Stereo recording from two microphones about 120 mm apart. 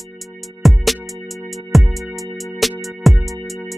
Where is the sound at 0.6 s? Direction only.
Centre (ahead or behind).